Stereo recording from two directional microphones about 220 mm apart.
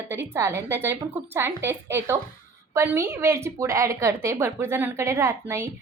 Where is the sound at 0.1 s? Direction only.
10° right (ahead or behind).